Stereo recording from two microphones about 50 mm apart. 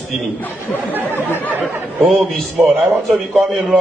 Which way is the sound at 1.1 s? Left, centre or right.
Left.